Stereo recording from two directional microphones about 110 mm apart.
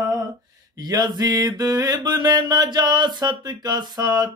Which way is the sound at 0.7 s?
40° right (ahead or behind).